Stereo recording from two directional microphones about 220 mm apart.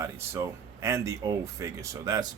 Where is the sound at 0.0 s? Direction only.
15° right (ahead or behind).